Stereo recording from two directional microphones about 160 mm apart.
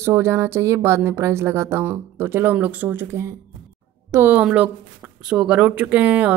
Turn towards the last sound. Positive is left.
turn(degrees=-10)  # may be behind; listen again after turning